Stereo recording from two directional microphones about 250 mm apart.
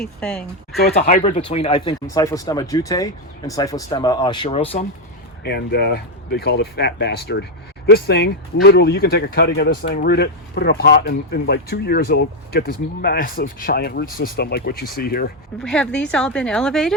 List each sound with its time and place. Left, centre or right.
0.0 s speech: centre
1.0 s speech: left
5.4 s speech: left
15.5 s speech: centre